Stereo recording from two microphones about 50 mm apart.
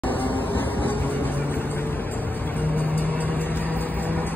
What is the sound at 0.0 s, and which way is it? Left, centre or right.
Vehicle, left.